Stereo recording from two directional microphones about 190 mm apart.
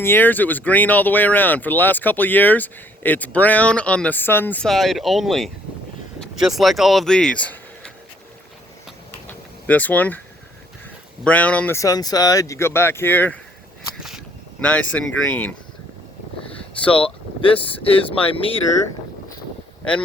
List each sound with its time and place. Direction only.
0.0 s speech: 10° left (ahead or behind)
9.6 s speech: 10° left (ahead or behind)
11.2 s speech: 5° left (ahead or behind)
14.6 s speech: 5° left (ahead or behind)
16.6 s vehicle: 5° left (ahead or behind)
17.4 s speech: 30° left (ahead or behind)